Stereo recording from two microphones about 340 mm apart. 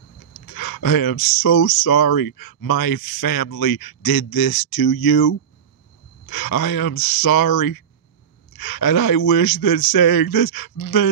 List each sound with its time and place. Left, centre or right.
0.5 s speech: left